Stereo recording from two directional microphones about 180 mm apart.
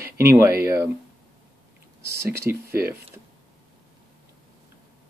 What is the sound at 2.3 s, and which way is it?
Speech, 15° right (ahead or behind).